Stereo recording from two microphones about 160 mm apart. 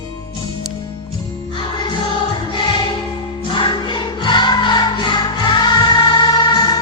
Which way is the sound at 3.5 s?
30° left (ahead or behind).